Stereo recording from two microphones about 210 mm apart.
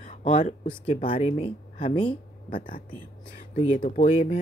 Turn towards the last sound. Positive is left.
turn(degrees=35)  # may be behind; listen again after turning